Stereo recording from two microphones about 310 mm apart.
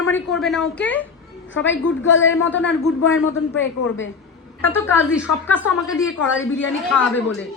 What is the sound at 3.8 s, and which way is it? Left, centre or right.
Speech, left.